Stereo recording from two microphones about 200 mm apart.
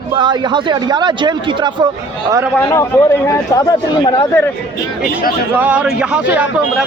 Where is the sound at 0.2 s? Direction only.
20° right (ahead or behind).